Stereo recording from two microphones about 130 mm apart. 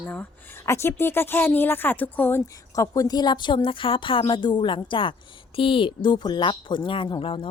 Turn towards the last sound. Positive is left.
turn(degrees=40)  # may be behind; listen again after turning